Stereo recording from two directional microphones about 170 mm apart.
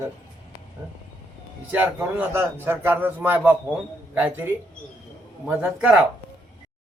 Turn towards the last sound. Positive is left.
turn(degrees=-5)  # may be behind; listen again after turning